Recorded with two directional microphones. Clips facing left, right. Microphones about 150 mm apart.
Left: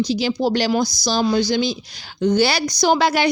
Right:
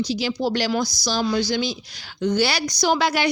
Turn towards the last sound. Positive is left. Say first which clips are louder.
# left 4 dB
turn(degrees=30)  # may be behind; listen again after turning